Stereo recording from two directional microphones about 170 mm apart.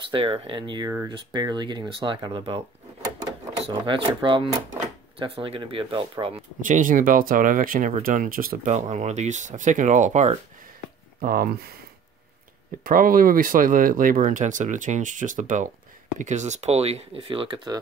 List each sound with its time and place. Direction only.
0.1 s speech: 35° right (ahead or behind)
3.6 s speech: 30° right (ahead or behind)
6.6 s speech: 50° right (ahead or behind)
8.7 s speech: 45° right (ahead or behind)
11.1 s speech: 60° right (ahead or behind)
12.8 s speech: 55° right (ahead or behind); by 17.7 s 30° right (ahead or behind)